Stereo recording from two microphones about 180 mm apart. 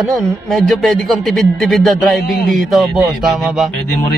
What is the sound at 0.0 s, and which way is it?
Speech, centre (ahead or behind).